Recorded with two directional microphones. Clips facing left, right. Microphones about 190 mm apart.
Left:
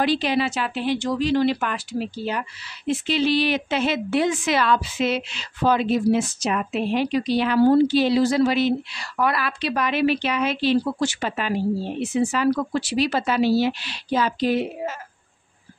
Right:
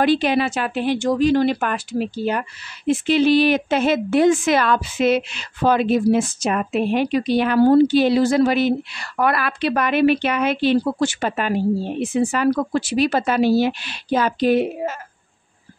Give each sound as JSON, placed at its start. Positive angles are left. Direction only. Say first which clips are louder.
{"t": 0.0, "sound": "speech", "louder": "right 4 dB", "side_deg": -55}